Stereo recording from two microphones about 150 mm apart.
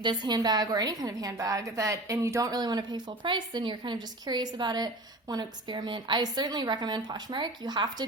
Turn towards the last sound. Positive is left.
turn(degrees=-30)  # may be behind; listen again after turning